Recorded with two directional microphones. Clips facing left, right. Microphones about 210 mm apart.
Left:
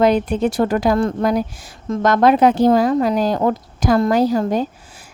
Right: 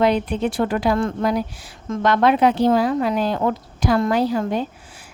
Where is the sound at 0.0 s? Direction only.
45° left (ahead or behind).